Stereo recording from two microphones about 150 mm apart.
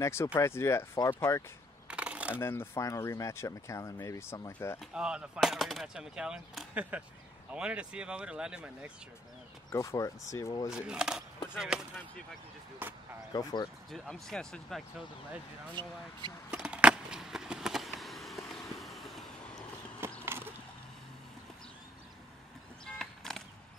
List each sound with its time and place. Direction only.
0.0 s speech: 20° left (ahead or behind)
1.9 s a sound: 10° right (ahead or behind)
2.4 s speech: 15° left (ahead or behind)
4.7 s speech: 5° right (ahead or behind)
9.7 s speech: 20° left (ahead or behind)
10.7 s speech: 5° right (ahead or behind)
12.8 s speech: 15° right (ahead or behind)
13.3 s speech: 25° left (ahead or behind)
13.8 s speech: centre (ahead or behind)
16.4 s a sound: 5° right (ahead or behind)
20.0 s a sound: 15° right (ahead or behind)
22.8 s a sound: 5° left (ahead or behind)